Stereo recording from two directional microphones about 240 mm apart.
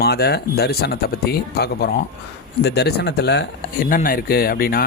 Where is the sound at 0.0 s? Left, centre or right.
Left.